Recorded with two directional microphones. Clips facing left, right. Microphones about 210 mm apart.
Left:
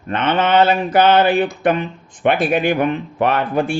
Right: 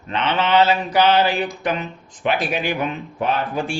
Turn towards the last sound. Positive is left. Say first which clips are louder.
# left 5 dB
turn(degrees=65)  # may be behind; listen again after turning